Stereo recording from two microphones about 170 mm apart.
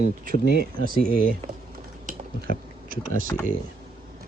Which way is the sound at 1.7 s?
50° right (ahead or behind).